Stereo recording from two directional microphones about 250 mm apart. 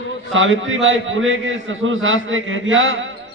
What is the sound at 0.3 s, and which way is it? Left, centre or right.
A man's voice, right.